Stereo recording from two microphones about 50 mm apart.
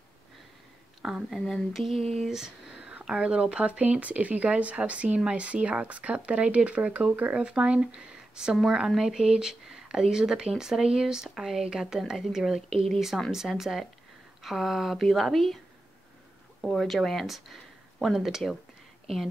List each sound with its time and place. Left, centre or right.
1.0 s speech: centre
1.4 s speech: centre
2.7 s whispering: right
3.1 s speech: centre
7.3 s speech: centre
16.6 s speech: centre